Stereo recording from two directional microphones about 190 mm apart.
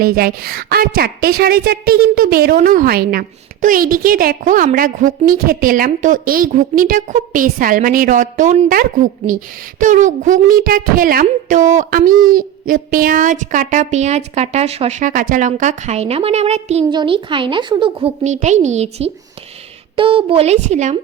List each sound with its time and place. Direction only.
0.0 s a woman's voice: 50° right (ahead or behind)